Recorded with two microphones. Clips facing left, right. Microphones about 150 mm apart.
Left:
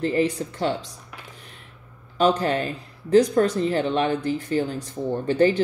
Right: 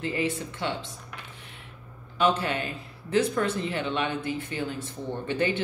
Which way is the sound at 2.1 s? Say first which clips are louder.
Left 5 dB; 40° left (ahead or behind).